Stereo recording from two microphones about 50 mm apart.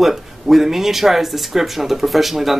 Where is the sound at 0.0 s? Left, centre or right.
Centre.